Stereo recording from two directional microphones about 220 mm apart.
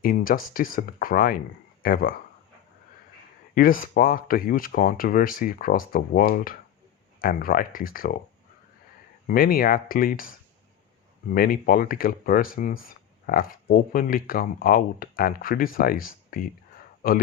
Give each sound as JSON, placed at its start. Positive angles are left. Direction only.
{"t": 0.0, "sound": "speech", "side_deg": 40}
{"t": 3.5, "sound": "speech", "side_deg": 40}
{"t": 9.2, "sound": "speech", "side_deg": 40}